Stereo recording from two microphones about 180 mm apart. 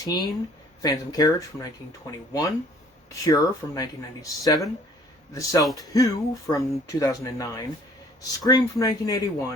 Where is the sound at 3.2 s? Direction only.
20° left (ahead or behind).